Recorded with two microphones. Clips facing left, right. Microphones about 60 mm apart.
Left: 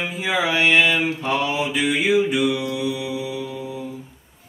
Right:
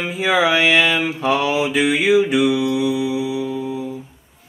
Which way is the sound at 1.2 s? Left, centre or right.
Right.